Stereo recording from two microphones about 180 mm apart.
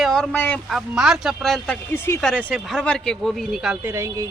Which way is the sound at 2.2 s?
Centre (ahead or behind).